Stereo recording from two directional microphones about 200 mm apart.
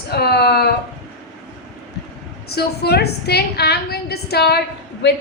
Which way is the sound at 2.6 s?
55° left (ahead or behind).